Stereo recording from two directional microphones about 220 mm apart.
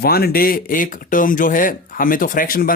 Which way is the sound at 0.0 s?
45° left (ahead or behind).